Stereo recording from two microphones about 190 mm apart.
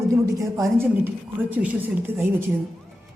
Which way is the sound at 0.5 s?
15° right (ahead or behind).